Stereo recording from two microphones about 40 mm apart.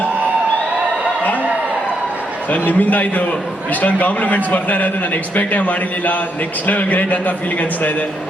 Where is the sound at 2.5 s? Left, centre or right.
Left.